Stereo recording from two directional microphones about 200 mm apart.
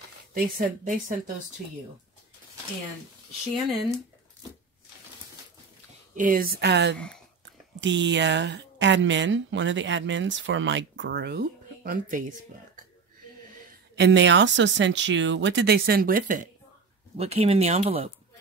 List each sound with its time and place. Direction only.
0.3 s a woman's voice: 45° right (ahead or behind)
6.1 s a woman's voice: 45° right (ahead or behind)
13.9 s a woman's voice: 60° right (ahead or behind); by 16.4 s 45° right (ahead or behind)
17.2 s speech: 30° right (ahead or behind)